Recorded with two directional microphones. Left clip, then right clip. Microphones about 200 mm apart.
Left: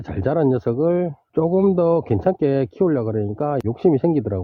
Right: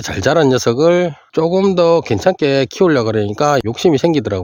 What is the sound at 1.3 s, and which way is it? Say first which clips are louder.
Speech: right 4 dB; 10° right (ahead or behind).